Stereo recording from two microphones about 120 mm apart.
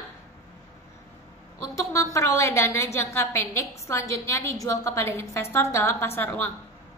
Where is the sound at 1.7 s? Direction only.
25° left (ahead or behind).